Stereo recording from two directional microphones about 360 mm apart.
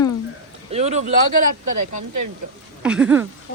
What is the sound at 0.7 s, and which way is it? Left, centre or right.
Speech, centre.